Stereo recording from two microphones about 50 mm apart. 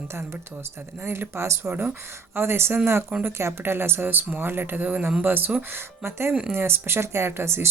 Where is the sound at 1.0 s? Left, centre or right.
Right.